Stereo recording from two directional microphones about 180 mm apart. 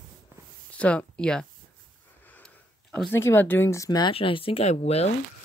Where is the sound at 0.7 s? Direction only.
5° left (ahead or behind); by 5.1 s 35° left (ahead or behind).